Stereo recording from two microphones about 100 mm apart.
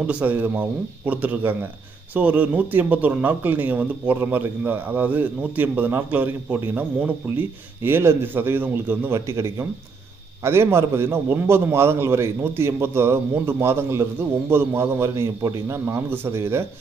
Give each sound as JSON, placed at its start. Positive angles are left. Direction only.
{"t": 0.0, "sound": "a man's voice", "side_deg": -15}